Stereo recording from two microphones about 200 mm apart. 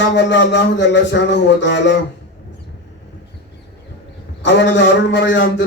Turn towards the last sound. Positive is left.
turn(degrees=65)  # may be behind; listen again after turning